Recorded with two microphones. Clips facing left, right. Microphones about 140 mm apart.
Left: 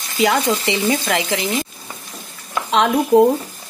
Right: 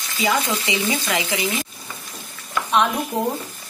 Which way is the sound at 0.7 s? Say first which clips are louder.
Left 4 dB; 60° left (ahead or behind).